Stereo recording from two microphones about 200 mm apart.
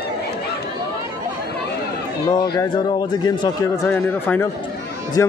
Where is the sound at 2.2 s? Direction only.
20° left (ahead or behind).